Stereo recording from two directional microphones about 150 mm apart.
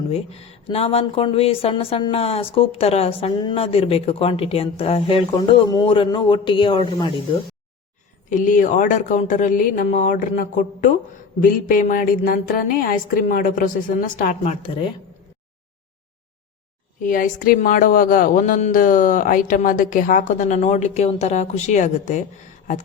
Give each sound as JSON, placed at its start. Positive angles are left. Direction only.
{"t": 0.1, "sound": "speech", "side_deg": 40}
{"t": 8.3, "sound": "a woman's voice", "side_deg": 60}
{"t": 17.0, "sound": "speech", "side_deg": 65}